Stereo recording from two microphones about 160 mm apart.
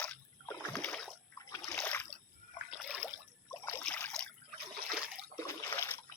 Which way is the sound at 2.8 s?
5° right (ahead or behind).